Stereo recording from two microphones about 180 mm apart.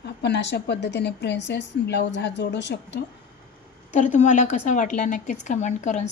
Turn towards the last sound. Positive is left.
turn(degrees=40)  # may be behind; listen again after turning